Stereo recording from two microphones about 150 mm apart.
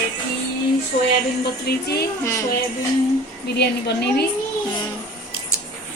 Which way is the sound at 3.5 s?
90° left.